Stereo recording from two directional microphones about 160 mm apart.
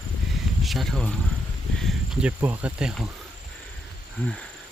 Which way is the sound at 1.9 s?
10° right (ahead or behind).